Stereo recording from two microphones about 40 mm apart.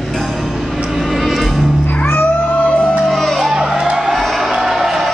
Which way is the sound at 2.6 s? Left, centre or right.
Left.